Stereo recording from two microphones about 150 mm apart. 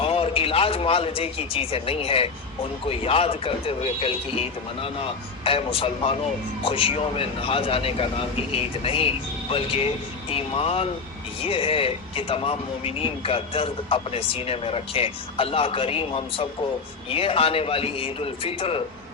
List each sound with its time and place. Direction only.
0.0 s a man's voice: 40° left (ahead or behind)